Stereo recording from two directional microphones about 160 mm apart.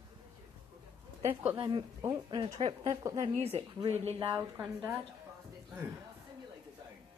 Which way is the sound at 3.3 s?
40° right (ahead or behind).